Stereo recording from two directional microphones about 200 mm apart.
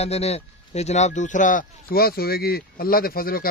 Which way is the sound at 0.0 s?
30° left (ahead or behind).